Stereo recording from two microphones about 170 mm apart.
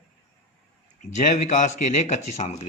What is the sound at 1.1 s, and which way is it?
Speech, 45° left (ahead or behind).